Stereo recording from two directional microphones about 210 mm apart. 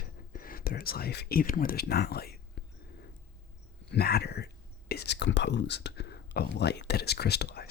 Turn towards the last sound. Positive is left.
turn(degrees=50)  # may be behind; listen again after turning